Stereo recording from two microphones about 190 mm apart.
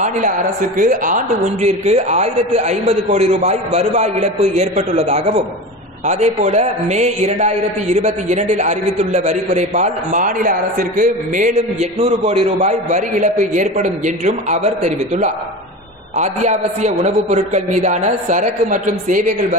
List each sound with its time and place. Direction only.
0.7 s a man's voice: 45° right (ahead or behind)
12.0 s a man's voice: 30° right (ahead or behind)